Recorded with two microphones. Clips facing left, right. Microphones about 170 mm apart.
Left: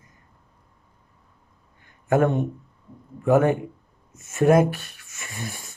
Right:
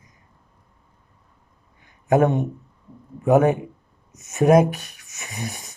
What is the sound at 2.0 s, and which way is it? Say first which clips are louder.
Speech: right 2 dB; 20° right (ahead or behind).